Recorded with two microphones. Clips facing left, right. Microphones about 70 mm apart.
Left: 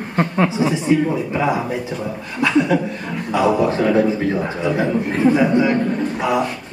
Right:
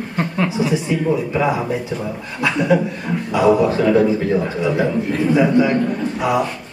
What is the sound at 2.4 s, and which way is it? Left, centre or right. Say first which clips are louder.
Speech: even; right.